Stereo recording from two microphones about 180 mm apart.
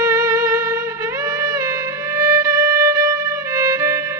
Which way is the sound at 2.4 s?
20° right (ahead or behind).